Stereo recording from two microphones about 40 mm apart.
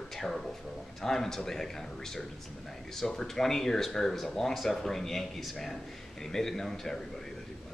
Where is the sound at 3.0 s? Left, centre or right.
Centre.